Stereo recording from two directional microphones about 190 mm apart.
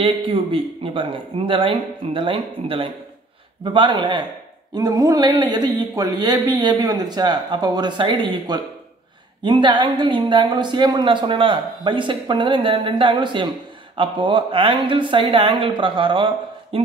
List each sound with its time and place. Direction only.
0.0 s a woman's voice: 30° right (ahead or behind)